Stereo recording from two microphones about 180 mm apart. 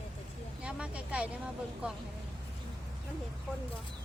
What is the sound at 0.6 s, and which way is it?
Vehicle, 5° right (ahead or behind).